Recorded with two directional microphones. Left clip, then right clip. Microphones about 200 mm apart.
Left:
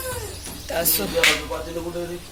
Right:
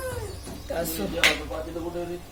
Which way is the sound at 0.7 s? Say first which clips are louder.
Left 4 dB; centre (ahead or behind).